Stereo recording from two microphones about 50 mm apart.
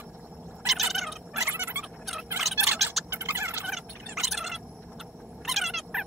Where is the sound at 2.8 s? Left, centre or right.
Centre.